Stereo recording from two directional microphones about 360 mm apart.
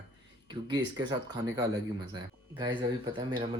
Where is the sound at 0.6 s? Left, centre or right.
Centre.